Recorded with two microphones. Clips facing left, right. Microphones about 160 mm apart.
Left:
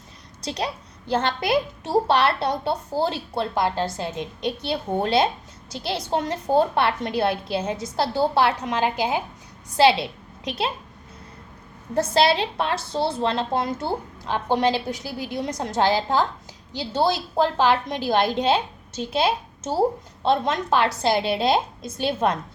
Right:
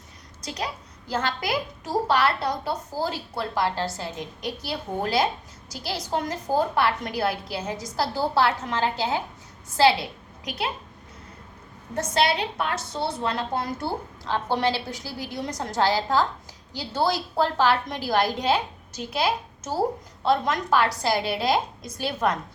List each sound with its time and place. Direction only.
0.4 s a woman's voice: 30° left (ahead or behind)
11.9 s a woman's voice: 30° left (ahead or behind)